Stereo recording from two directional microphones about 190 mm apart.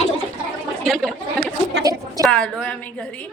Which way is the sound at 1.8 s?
20° right (ahead or behind).